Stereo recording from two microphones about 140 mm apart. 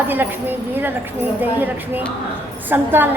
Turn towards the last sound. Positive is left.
turn(degrees=-15)  # may be behind; listen again after turning